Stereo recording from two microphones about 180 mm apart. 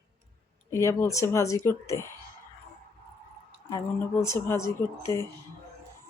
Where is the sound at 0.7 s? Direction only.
15° left (ahead or behind).